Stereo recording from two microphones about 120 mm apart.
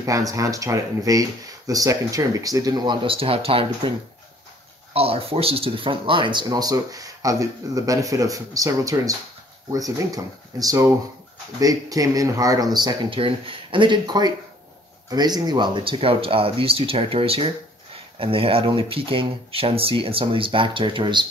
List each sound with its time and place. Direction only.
0.0 s speech: 30° right (ahead or behind); by 3.9 s 50° right (ahead or behind)
4.9 s speech: 55° right (ahead or behind)
6.4 s speech: 30° right (ahead or behind)